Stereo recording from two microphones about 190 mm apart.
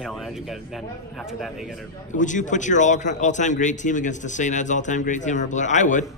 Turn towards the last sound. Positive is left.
turn(degrees=40)  # may be behind; listen again after turning